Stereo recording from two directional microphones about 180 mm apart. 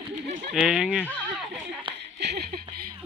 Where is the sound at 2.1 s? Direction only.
65° right (ahead or behind).